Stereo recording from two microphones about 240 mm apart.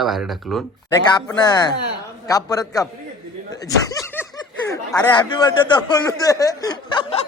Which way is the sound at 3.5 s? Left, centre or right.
Centre.